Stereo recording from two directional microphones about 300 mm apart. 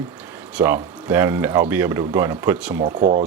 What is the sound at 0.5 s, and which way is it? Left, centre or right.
Speech, centre.